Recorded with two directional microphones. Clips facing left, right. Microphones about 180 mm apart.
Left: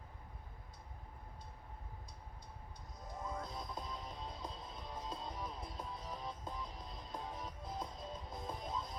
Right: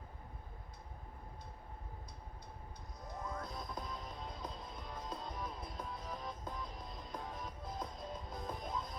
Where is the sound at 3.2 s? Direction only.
25° left (ahead or behind).